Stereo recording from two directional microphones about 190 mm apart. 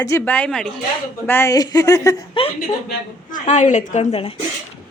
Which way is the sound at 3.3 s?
40° left (ahead or behind).